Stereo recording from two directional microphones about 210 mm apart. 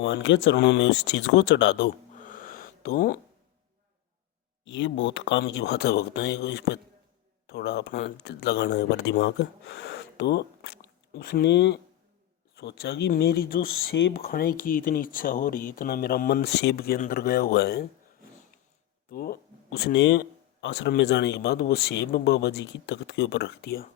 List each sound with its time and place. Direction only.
0.0 s speech: 60° left (ahead or behind)
2.1 s a sound: 40° left (ahead or behind)
4.6 s a man's voice: 60° left (ahead or behind)
19.1 s speech: 45° left (ahead or behind)